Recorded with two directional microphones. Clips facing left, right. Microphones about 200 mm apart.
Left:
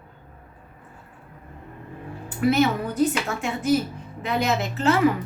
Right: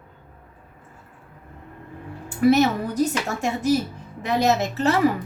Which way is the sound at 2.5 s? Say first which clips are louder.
Right 1 dB; 40° right (ahead or behind).